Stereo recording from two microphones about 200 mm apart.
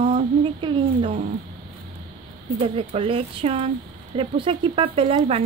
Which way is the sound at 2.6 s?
30° right (ahead or behind).